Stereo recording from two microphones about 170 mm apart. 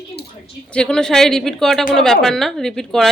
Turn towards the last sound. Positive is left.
turn(degrees=0)  # may be behind; listen again after turning